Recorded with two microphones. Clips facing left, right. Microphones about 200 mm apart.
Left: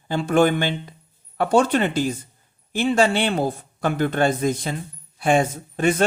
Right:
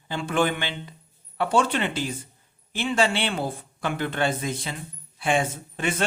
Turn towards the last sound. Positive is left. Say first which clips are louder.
# left 7 dB
turn(degrees=40)  # may be behind; listen again after turning